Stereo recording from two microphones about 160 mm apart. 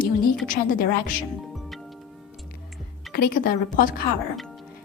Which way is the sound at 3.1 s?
70° left (ahead or behind).